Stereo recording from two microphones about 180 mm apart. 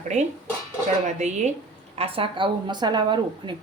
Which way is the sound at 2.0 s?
30° right (ahead or behind).